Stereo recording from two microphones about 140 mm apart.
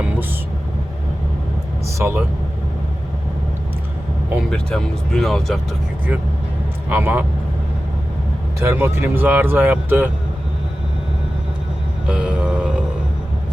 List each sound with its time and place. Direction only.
2.0 s speech: 15° right (ahead or behind)
4.5 s speech: 5° left (ahead or behind)
6.8 s speech: 15° right (ahead or behind)
8.6 s speech: 15° right (ahead or behind)
12.0 s vehicle: 10° right (ahead or behind)